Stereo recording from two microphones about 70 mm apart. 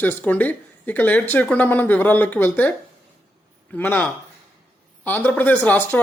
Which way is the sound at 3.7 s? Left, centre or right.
Left.